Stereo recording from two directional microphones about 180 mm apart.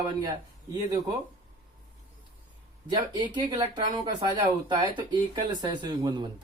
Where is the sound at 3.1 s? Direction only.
25° right (ahead or behind).